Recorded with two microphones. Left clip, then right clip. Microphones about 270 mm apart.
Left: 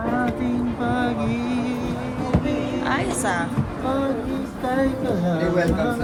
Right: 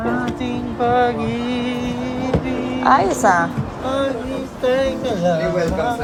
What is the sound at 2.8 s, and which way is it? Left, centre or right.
Speech, centre.